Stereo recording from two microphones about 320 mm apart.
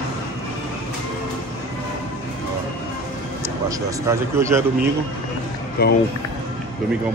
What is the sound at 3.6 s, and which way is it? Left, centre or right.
Speech, centre.